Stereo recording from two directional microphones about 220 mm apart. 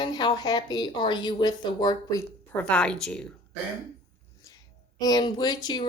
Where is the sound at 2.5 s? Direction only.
5° left (ahead or behind).